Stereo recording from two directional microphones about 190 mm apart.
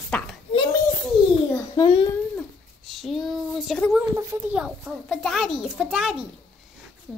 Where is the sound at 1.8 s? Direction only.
25° left (ahead or behind).